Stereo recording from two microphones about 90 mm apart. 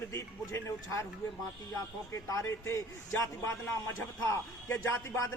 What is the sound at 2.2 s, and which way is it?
A man's voice, 35° left (ahead or behind).